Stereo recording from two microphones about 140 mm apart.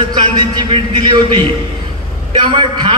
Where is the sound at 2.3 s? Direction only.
35° right (ahead or behind).